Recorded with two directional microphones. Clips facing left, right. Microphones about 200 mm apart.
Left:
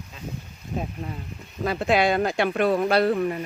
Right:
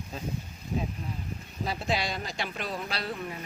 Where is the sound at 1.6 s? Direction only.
55° left (ahead or behind).